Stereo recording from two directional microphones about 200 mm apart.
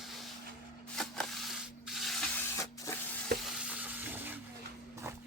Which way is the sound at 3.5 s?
5° right (ahead or behind).